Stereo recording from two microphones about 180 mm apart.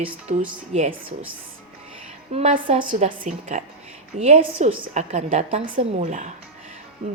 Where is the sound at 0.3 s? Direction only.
40° right (ahead or behind).